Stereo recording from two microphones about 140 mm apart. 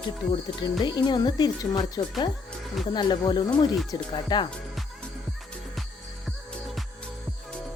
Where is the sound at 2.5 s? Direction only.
Centre (ahead or behind).